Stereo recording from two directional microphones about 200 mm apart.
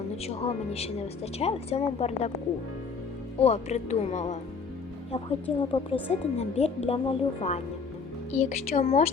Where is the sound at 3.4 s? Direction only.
35° left (ahead or behind).